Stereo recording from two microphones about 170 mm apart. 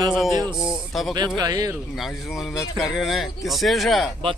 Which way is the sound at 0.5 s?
20° left (ahead or behind).